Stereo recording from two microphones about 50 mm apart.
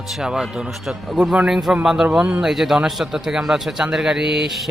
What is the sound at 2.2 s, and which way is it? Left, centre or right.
Speech, right.